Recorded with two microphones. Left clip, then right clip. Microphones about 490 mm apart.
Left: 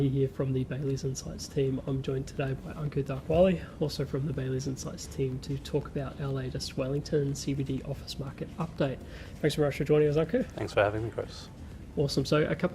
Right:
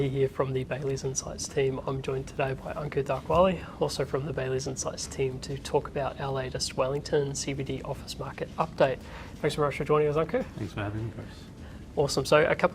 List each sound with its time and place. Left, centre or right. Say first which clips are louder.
0.0 s speech: right 3 dB; right
3.2 s speech: even; right
3.8 s speech: right 5 dB; right
9.4 s speech: right 1 dB; right
11.9 s speech: right 5 dB; right